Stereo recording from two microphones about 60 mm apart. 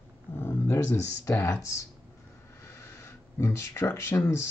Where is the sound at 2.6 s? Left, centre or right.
Left.